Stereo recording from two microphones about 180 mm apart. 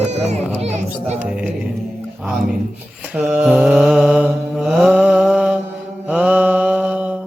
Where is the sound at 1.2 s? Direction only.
5° right (ahead or behind).